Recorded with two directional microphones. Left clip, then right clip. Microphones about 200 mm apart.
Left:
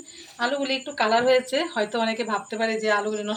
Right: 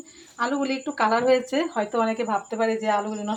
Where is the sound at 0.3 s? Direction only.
50° right (ahead or behind).